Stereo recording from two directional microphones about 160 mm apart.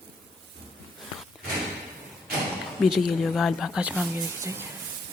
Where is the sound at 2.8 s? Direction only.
Centre (ahead or behind); by 4.6 s 20° right (ahead or behind).